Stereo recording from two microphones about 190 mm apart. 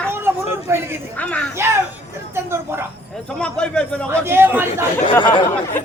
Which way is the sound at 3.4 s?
5° left (ahead or behind).